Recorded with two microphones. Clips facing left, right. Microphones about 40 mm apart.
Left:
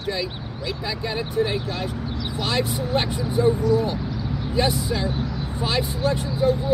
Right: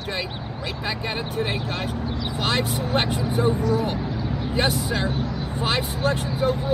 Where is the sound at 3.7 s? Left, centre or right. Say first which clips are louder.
Left 2 dB; right.